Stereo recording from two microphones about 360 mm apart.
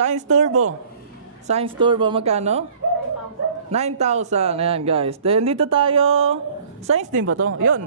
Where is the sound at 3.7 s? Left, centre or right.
Centre.